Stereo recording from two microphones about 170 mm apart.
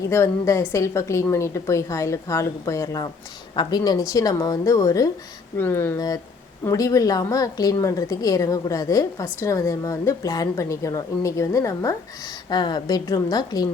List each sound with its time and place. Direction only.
0.1 s a woman's voice: 15° left (ahead or behind)